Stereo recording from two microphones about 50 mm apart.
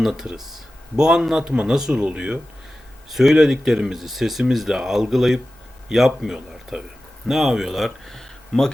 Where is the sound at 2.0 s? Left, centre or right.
Right.